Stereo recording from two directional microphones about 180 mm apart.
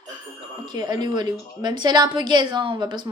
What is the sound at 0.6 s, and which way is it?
A woman's voice, 20° right (ahead or behind).